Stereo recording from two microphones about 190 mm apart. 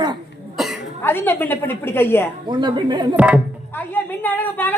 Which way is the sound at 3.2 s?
5° right (ahead or behind).